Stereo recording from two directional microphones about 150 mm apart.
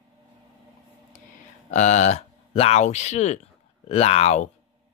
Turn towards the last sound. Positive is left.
turn(degrees=50)  # may be behind; listen again after turning